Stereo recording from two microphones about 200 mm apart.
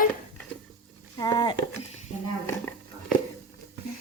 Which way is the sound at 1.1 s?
20° left (ahead or behind).